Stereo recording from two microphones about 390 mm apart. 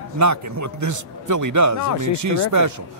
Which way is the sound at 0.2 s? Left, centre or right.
Right.